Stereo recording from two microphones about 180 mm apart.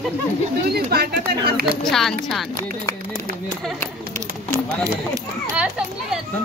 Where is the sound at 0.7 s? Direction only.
60° right (ahead or behind).